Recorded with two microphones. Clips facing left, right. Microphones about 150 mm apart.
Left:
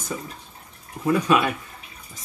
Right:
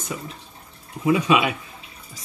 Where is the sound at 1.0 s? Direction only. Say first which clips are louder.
Right 1 dB; 10° right (ahead or behind).